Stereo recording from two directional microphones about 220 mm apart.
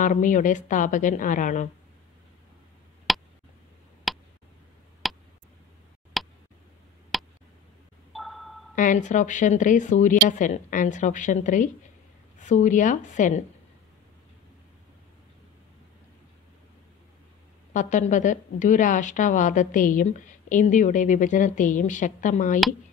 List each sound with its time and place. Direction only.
0.0 s a woman's voice: 35° left (ahead or behind)
3.1 s a sound: centre (ahead or behind)
7.1 s tick: centre (ahead or behind)
8.1 s a sound: centre (ahead or behind)
8.7 s a woman's voice: 35° left (ahead or behind)
17.7 s a woman's voice: 35° left (ahead or behind)